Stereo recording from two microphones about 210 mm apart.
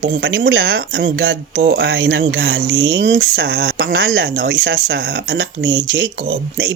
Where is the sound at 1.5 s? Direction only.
65° right (ahead or behind).